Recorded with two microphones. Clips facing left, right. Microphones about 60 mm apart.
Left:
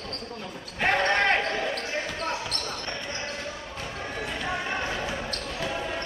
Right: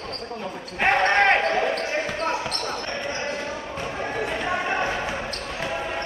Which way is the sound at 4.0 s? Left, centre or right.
Right.